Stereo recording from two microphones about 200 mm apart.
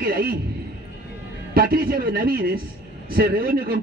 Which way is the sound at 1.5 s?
50° right (ahead or behind).